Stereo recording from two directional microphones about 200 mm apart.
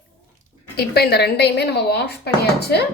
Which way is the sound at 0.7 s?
55° left (ahead or behind).